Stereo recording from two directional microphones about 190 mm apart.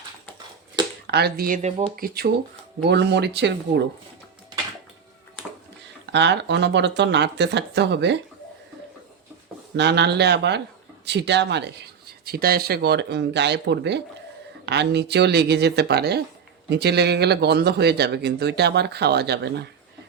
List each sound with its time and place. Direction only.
1.0 s speech: 60° right (ahead or behind)
6.1 s speech: 65° right (ahead or behind)
9.7 s speech: 60° right (ahead or behind)